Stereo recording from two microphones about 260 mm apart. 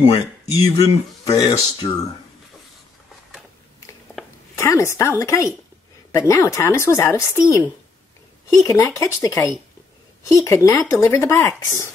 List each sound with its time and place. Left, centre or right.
0.0 s speech: left
4.2 s a sound: centre
4.6 s speech: centre
8.6 s speech: centre